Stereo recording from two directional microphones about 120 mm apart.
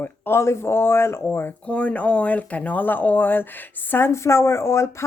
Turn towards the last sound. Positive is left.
turn(degrees=20)  # may be behind; listen again after turning